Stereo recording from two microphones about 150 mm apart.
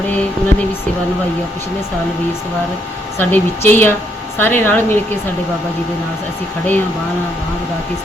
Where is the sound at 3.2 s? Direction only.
15° left (ahead or behind).